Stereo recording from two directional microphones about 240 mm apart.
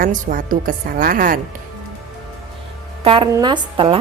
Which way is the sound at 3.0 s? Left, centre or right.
Centre.